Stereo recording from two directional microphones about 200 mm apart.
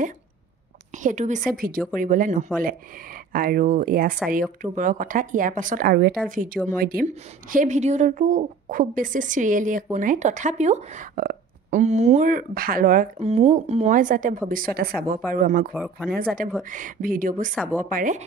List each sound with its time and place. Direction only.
0.9 s a woman's voice: 35° right (ahead or behind)
15.7 s speech: 5° right (ahead or behind)
16.1 s a woman's voice: 45° right (ahead or behind)